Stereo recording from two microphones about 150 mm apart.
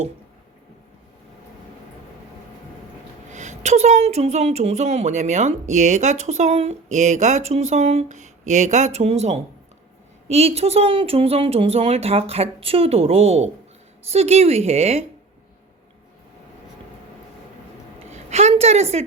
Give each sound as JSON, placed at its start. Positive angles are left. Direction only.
{"t": 3.3, "sound": "a woman's voice", "side_deg": -50}
{"t": 18.1, "sound": "a woman's voice", "side_deg": -45}